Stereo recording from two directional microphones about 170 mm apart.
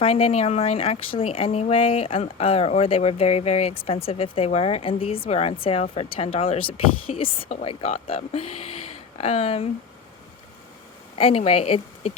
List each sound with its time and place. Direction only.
0.0 s speech: 35° left (ahead or behind)
11.2 s speech: 35° left (ahead or behind)